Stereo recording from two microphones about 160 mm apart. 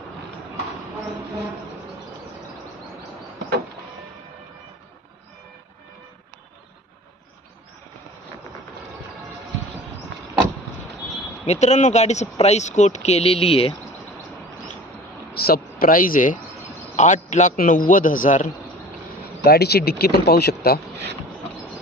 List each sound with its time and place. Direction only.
10.1 s vehicle: 90° right
11.4 s speech: 45° left (ahead or behind)
15.4 s a man's voice: 70° left (ahead or behind); by 18.5 s 55° left (ahead or behind)
19.2 s speech: 80° left